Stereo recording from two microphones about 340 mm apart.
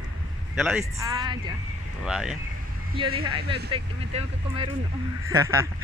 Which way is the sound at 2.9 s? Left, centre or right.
Centre.